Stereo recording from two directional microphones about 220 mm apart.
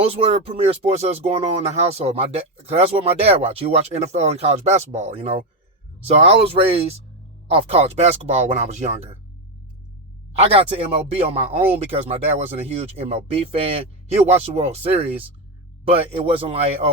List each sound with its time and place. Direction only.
0.0 s speech: 25° right (ahead or behind)
10.4 s speech: 25° right (ahead or behind)